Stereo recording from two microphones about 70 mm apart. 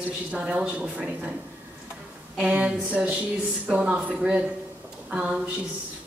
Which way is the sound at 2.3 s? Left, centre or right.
Centre.